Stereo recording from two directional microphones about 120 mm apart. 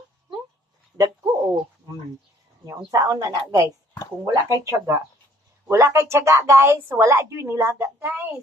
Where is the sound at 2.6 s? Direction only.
30° right (ahead or behind).